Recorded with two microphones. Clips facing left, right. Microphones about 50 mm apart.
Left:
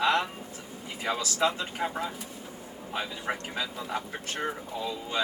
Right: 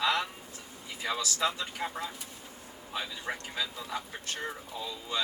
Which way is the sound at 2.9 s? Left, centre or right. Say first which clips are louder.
Left 4 dB; left.